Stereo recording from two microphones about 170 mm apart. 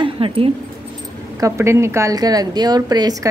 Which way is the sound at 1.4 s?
15° right (ahead or behind).